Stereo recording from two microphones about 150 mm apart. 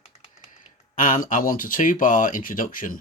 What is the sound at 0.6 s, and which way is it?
Speech, 60° left (ahead or behind).